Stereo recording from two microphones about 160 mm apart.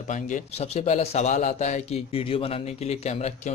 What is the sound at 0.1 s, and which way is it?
A man's voice, 45° left (ahead or behind).